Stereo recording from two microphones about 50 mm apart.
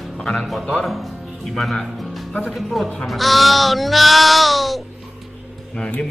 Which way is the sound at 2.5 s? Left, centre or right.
Centre.